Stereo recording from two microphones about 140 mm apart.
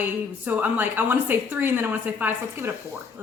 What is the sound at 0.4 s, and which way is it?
A woman's voice, 15° right (ahead or behind).